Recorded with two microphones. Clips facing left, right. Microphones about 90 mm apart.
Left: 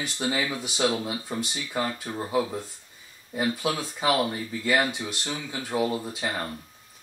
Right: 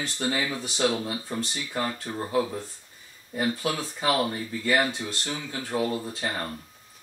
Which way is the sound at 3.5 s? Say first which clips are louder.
Left 1 dB; 15° left (ahead or behind).